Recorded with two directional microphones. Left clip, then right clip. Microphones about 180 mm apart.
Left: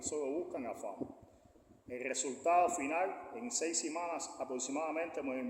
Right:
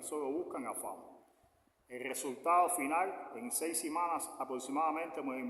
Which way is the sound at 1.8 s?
15° right (ahead or behind).